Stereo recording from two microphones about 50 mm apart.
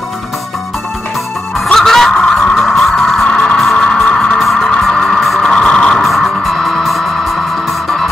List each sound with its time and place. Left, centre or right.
1.7 s music: centre
4.4 s music: centre
4.9 s music: centre
6.0 s music: centre